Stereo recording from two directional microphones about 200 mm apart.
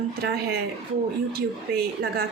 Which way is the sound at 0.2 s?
50° right (ahead or behind).